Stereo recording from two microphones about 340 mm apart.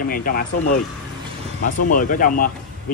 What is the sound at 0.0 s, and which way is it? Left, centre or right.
Speech, left.